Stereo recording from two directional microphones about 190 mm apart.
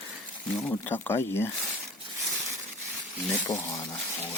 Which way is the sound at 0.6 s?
10° left (ahead or behind).